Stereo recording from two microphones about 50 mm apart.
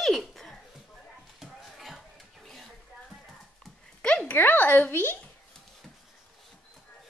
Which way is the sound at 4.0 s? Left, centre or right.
Left.